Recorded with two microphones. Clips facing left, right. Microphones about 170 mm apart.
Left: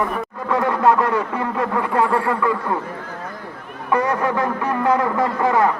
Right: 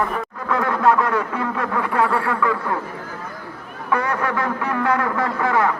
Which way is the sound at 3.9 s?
15° left (ahead or behind).